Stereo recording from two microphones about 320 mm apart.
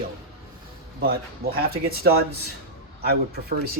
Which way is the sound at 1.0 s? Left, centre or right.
Right.